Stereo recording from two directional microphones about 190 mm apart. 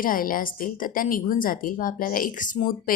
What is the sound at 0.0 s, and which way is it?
A woman's voice, 45° left (ahead or behind).